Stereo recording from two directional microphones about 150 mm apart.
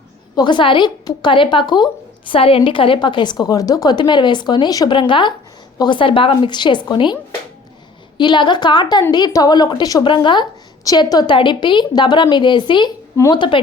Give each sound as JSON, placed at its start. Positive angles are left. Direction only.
{"t": 0.3, "sound": "a woman's voice", "side_deg": 30}
{"t": 8.2, "sound": "a woman's voice", "side_deg": 30}